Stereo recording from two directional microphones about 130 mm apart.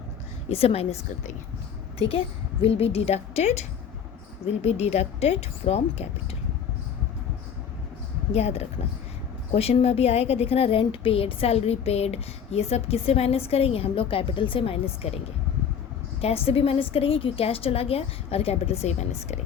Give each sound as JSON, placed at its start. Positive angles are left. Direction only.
{"t": 0.4, "sound": "a woman's voice", "side_deg": 50}
{"t": 2.0, "sound": "a woman's voice", "side_deg": 45}
{"t": 8.3, "sound": "a woman's voice", "side_deg": 55}
{"t": 16.2, "sound": "a woman's voice", "side_deg": 50}